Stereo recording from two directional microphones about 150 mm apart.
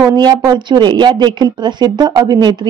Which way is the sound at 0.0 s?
25° right (ahead or behind).